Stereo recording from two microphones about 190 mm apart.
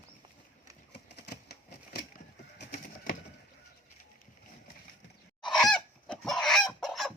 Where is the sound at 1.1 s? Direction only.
60° left (ahead or behind).